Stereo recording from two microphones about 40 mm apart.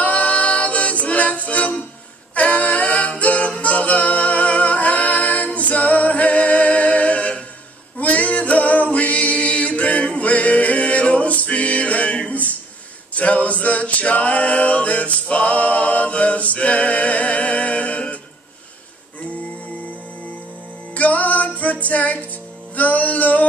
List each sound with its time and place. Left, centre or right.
0.0 s music: left
2.3 s a capella: left
8.0 s music: left
12.3 s a sound: left
13.1 s a capella: left
20.9 s music: left